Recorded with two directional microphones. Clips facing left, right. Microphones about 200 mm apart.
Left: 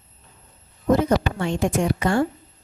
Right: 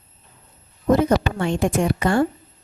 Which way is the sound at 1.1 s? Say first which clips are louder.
Right 2 dB; 55° right (ahead or behind).